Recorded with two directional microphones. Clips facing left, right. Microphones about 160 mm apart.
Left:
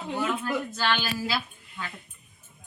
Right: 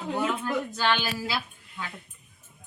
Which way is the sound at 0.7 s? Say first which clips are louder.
Right 1 dB; 20° right (ahead or behind).